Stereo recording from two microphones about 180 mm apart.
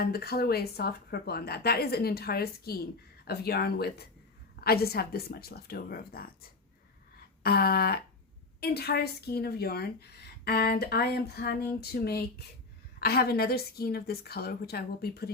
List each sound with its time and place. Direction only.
0.0 s a woman's voice: 60° left (ahead or behind)
7.4 s a woman's voice: 60° left (ahead or behind)